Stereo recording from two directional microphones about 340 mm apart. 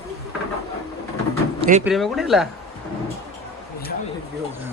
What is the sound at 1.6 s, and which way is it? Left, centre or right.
Speech, right.